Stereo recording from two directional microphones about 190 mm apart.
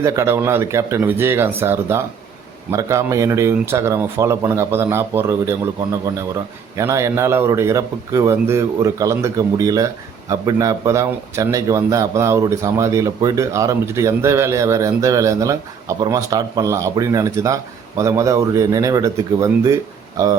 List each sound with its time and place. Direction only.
0.0 s a man's voice: 15° right (ahead or behind)